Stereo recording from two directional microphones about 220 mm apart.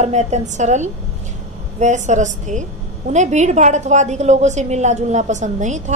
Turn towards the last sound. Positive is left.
turn(degrees=-35)  # may be behind; listen again after turning